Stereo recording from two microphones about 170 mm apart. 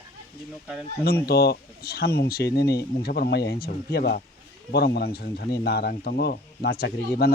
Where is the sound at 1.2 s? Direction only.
65° left (ahead or behind).